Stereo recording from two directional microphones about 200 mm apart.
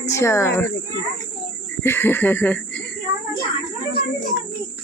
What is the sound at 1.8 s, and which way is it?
Speech, 10° left (ahead or behind).